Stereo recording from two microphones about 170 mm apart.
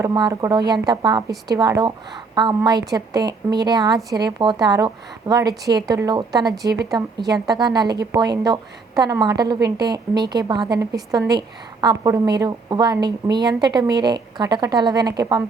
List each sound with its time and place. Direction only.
0.0 s a woman's voice: 20° right (ahead or behind)